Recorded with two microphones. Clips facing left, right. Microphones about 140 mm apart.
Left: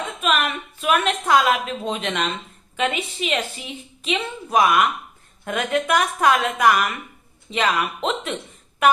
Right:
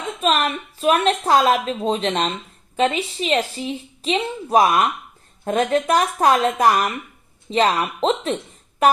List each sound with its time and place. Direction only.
0.2 s a woman's voice: 35° right (ahead or behind)